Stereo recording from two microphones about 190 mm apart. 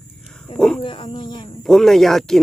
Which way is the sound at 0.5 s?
5° left (ahead or behind).